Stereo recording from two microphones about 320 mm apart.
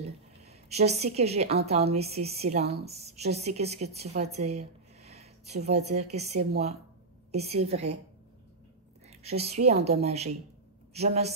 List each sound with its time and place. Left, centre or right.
0.0 s a sound: centre
1.7 s a woman's voice: centre
9.2 s a woman's voice: centre